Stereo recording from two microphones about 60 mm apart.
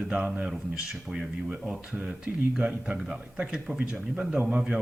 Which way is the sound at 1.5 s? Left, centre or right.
Right.